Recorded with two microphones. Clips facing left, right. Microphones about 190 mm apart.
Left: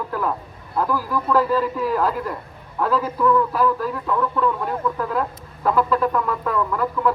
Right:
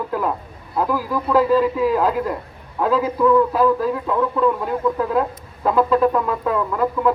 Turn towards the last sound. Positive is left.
turn(degrees=-20)  # may be behind; listen again after turning